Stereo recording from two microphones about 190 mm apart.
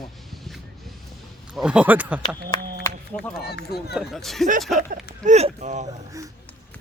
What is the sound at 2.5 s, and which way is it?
Speech, 20° left (ahead or behind).